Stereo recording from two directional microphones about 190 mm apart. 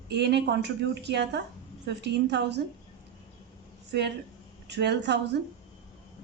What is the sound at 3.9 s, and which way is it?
Speech, 65° right (ahead or behind).